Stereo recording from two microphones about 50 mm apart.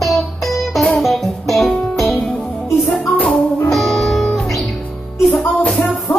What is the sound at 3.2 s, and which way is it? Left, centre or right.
Music, centre.